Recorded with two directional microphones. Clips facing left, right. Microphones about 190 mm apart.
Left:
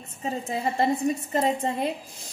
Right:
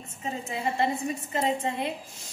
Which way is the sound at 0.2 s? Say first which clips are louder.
Left 3 dB; 35° left (ahead or behind).